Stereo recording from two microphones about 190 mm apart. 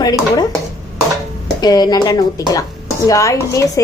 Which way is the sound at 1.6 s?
20° left (ahead or behind).